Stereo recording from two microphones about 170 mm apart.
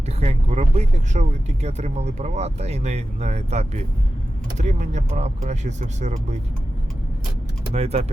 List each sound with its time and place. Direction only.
0.2 s speech: 40° right (ahead or behind)
7.7 s speech: 40° right (ahead or behind)